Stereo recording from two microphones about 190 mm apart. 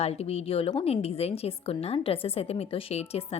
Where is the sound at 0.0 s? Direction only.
35° left (ahead or behind).